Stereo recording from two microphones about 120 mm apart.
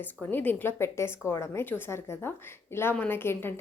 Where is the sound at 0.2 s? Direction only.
15° left (ahead or behind).